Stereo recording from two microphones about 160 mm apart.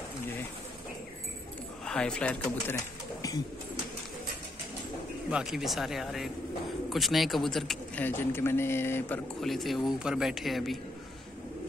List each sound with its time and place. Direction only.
1.9 s speech: 5° left (ahead or behind)
3.2 s bird: 20° left (ahead or behind)
5.3 s speech: 5° right (ahead or behind); by 9.2 s 15° left (ahead or behind)
9.4 s speech: centre (ahead or behind)